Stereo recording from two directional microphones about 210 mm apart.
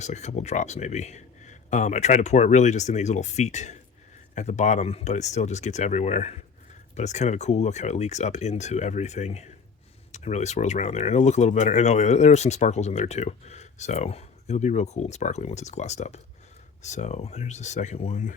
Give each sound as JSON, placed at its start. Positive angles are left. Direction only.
{"t": 0.0, "sound": "speech", "side_deg": 35}